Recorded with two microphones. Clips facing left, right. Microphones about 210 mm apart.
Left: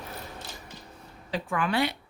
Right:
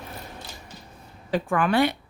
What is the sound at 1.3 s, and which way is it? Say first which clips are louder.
Speech: right 6 dB; 50° right (ahead or behind).